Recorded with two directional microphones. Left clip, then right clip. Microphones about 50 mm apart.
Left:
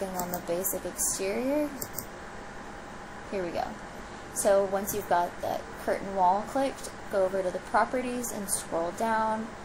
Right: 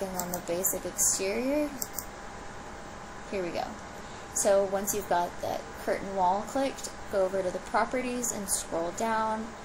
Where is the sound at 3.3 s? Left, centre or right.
Left.